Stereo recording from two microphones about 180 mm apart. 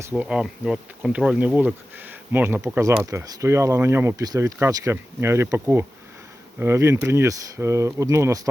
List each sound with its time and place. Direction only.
0.1 s bee: 5° right (ahead or behind)